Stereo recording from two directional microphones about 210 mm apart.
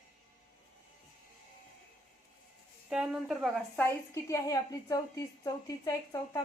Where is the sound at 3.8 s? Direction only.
15° left (ahead or behind).